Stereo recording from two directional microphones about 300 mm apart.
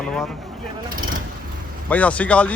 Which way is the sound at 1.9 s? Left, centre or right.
Centre.